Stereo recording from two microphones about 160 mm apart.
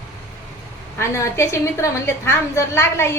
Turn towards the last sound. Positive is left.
turn(degrees=15)  # may be behind; listen again after turning